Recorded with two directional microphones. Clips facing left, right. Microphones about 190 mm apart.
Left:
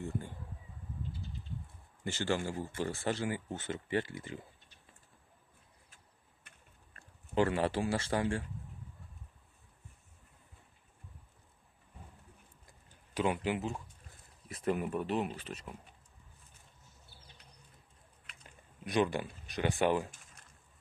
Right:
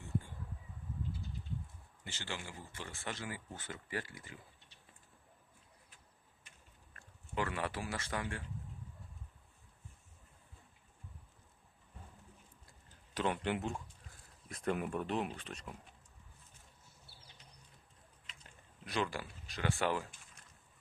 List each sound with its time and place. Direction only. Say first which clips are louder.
2.0 s speech: left 12 dB; 45° left (ahead or behind); by 4.4 s 25° left (ahead or behind)
6.9 s a man's voice: left 8 dB; 30° left (ahead or behind)
13.1 s speech: left 3 dB; 10° left (ahead or behind)
18.9 s speech: left 7 dB; 15° left (ahead or behind)